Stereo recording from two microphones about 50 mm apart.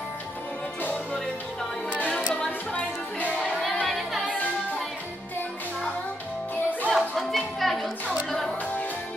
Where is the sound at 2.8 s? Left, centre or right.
Left.